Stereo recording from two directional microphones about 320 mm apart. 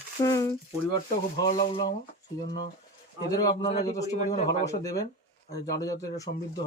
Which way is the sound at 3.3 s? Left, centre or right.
Centre.